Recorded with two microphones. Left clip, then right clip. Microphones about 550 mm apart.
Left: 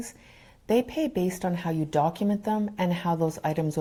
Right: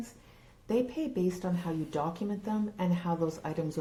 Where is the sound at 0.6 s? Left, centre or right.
Left.